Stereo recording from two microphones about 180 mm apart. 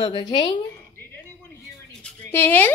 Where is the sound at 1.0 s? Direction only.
10° left (ahead or behind).